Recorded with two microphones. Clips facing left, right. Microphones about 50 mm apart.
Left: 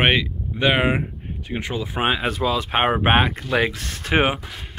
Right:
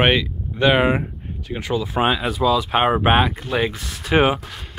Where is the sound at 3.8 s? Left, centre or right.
Left.